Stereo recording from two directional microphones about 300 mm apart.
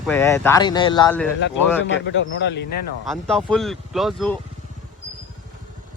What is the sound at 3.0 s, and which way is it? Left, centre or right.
Speech, centre.